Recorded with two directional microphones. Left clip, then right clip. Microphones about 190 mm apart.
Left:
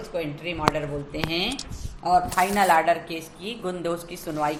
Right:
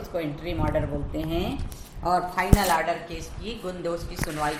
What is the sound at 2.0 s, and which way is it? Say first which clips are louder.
Speech: left 4 dB; 35° left (ahead or behind).